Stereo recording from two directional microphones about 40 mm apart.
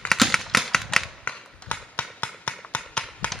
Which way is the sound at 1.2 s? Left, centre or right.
Left.